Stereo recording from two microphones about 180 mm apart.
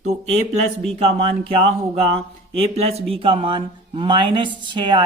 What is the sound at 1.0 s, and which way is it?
Speech, 30° right (ahead or behind).